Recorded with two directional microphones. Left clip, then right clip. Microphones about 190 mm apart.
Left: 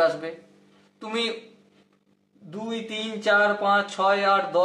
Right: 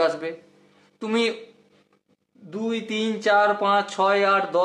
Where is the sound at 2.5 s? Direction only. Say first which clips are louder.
Right 4 dB; 45° right (ahead or behind).